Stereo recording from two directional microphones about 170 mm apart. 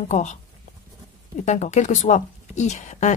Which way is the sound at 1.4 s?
45° left (ahead or behind).